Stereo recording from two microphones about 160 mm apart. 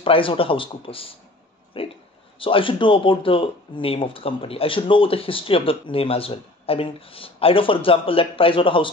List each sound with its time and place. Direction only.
0.0 s speech: 35° left (ahead or behind)
1.8 s a sound: 35° left (ahead or behind)
2.3 s speech: 35° left (ahead or behind)